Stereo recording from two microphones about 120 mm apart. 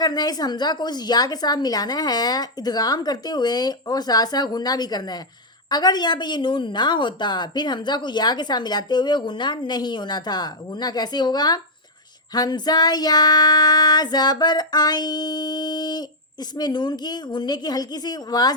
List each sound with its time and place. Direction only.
0.0 s female singing: 35° left (ahead or behind)